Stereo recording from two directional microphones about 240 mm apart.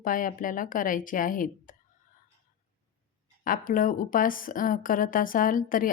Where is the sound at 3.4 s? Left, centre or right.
Left.